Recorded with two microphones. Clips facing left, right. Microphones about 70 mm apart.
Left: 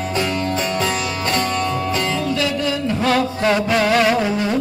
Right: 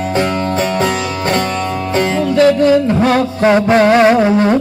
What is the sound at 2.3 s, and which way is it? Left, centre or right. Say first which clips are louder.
Music: right 11 dB; right.